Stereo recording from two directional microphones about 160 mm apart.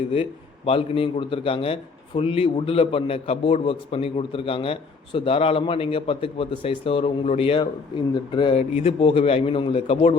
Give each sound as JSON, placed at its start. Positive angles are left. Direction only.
{"t": 0.1, "sound": "a man's voice", "side_deg": 35}